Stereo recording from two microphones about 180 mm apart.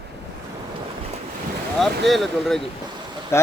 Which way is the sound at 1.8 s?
Centre (ahead or behind).